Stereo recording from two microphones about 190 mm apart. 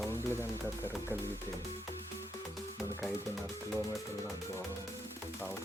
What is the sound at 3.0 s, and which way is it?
Speech, centre (ahead or behind).